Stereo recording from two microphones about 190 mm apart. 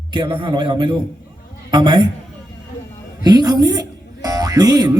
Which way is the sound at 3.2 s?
20° right (ahead or behind).